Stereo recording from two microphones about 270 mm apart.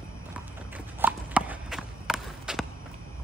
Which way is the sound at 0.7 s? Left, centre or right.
Centre.